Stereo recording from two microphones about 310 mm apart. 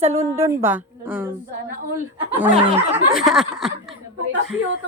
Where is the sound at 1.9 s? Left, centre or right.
Centre.